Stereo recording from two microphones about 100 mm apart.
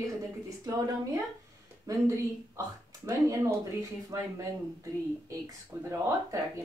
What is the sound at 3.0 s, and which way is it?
A woman's voice, 30° right (ahead or behind).